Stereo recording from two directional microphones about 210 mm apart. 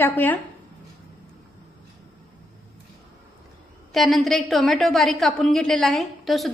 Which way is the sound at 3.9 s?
Centre (ahead or behind).